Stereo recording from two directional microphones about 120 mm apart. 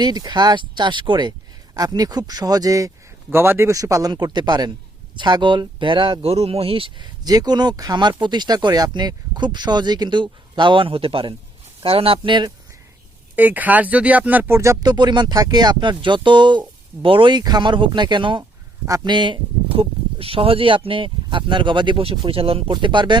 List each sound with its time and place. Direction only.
0.0 s speech: 35° right (ahead or behind)
7.3 s speech: 35° right (ahead or behind)
13.3 s speech: 15° right (ahead or behind); by 23.1 s 40° right (ahead or behind)